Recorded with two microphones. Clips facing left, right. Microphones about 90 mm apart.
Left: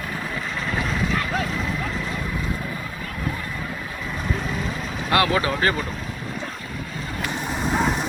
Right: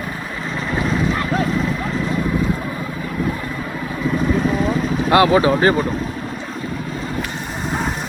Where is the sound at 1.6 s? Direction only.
20° right (ahead or behind).